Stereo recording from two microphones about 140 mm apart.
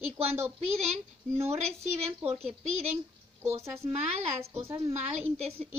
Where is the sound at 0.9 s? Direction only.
50° right (ahead or behind).